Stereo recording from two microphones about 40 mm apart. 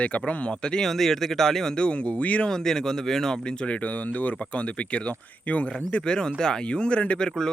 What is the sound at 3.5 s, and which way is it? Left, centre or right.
Speech, left.